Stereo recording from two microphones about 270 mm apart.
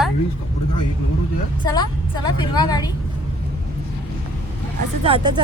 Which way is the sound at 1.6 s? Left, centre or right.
Centre.